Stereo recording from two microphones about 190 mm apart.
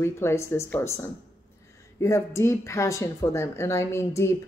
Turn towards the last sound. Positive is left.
turn(degrees=15)  # may be behind; listen again after turning